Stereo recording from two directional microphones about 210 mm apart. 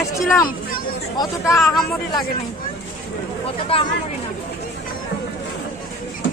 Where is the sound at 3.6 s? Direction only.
25° left (ahead or behind).